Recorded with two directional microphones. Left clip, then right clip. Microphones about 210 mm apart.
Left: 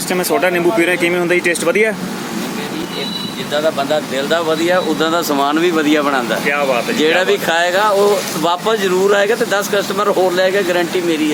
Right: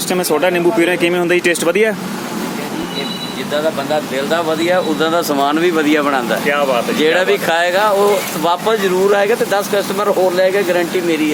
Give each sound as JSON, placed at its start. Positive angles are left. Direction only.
{"t": 0.1, "sound": "speech", "side_deg": -15}
{"t": 3.5, "sound": "speech", "side_deg": 0}